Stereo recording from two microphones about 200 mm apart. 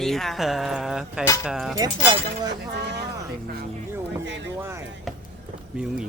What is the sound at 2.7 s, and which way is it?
Speech, 55° right (ahead or behind).